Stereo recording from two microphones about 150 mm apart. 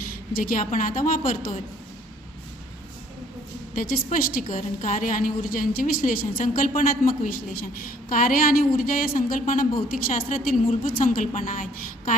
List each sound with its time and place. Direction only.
0.1 s a woman's voice: 70° left (ahead or behind)
3.8 s a woman's voice: 70° left (ahead or behind)
4.5 s a woman's voice: 60° left (ahead or behind)